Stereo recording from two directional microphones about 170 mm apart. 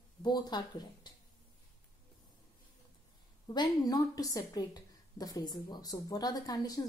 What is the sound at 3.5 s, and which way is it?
A woman's voice, 25° left (ahead or behind).